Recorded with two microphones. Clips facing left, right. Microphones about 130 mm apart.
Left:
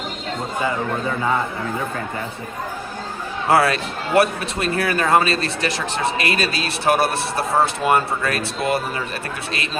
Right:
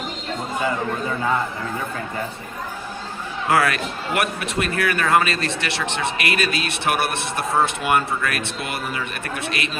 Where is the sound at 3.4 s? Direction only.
30° left (ahead or behind).